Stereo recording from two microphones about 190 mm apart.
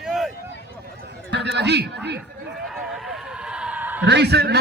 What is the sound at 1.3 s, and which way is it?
Speech, 65° right (ahead or behind).